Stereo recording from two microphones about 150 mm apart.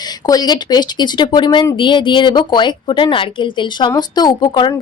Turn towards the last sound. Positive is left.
turn(degrees=35)  # may be behind; listen again after turning